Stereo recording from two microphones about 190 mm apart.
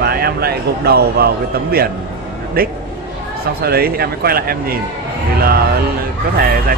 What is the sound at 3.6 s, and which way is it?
Speech, 55° right (ahead or behind).